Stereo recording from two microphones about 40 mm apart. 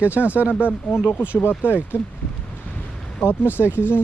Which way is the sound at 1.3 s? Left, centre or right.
Left.